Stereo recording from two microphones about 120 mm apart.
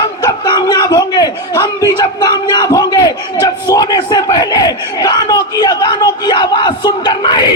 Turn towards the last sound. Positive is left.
turn(degrees=40)  # may be behind; listen again after turning